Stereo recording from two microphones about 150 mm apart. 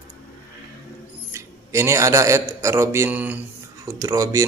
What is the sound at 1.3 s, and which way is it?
Speech, 20° right (ahead or behind).